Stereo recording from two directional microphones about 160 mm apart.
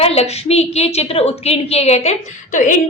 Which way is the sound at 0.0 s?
40° left (ahead or behind).